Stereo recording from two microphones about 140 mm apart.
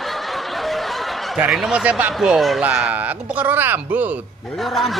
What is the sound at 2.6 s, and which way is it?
Speech, 10° right (ahead or behind).